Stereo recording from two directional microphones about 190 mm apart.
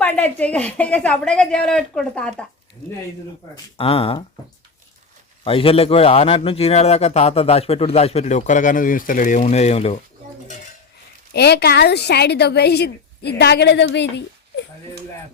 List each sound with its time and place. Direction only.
0.0 s a woman's voice: 10° left (ahead or behind)
3.8 s speech: 30° left (ahead or behind)
5.4 s a man's voice: 30° left (ahead or behind)
11.3 s a woman's voice: 60° left (ahead or behind)